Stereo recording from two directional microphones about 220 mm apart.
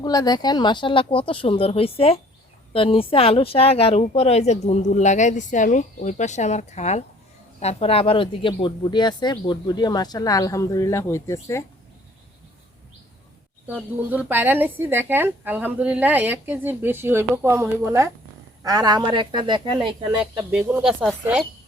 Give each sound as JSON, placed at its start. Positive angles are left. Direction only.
{"t": 0.0, "sound": "speech", "side_deg": 15}
{"t": 13.7, "sound": "speech", "side_deg": -5}
{"t": 20.1, "sound": "speech", "side_deg": -5}